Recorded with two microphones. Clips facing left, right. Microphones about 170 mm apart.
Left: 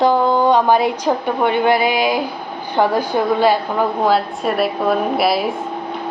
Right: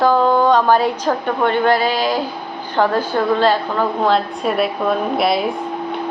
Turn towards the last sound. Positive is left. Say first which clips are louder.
# left 1 dB
turn(degrees=5)  # may be behind; listen again after turning